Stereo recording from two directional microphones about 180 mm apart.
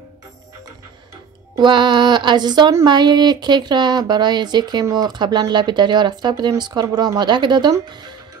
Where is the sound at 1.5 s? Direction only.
25° right (ahead or behind).